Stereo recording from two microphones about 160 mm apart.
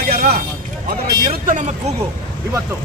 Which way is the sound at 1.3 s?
55° right (ahead or behind).